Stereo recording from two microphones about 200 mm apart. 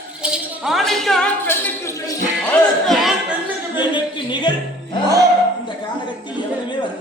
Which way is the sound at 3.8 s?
20° left (ahead or behind).